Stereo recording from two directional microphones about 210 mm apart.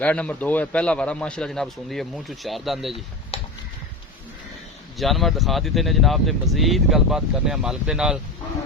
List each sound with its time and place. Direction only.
0.0 s speech: 5° left (ahead or behind)
3.3 s a sound: 30° left (ahead or behind)
4.9 s speech: centre (ahead or behind)